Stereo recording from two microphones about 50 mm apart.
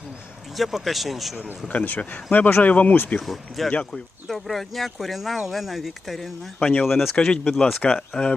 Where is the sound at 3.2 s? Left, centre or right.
Centre.